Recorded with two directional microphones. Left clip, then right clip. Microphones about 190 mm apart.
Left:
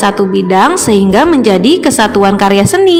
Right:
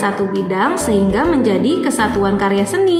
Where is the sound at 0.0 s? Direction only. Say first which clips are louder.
Left 7 dB; 45° left (ahead or behind).